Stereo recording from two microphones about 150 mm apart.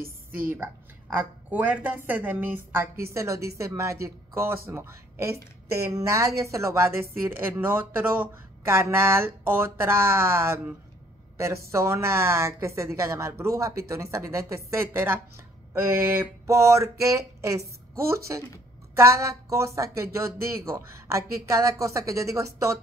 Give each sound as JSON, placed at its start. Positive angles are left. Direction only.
{"t": 0.0, "sound": "a sound", "side_deg": -70}
{"t": 1.5, "sound": "a woman's voice", "side_deg": -10}
{"t": 11.3, "sound": "a woman's voice", "side_deg": -20}